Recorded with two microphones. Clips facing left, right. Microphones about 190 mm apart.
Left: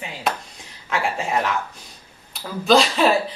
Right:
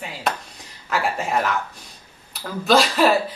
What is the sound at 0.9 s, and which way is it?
Speech, centre (ahead or behind).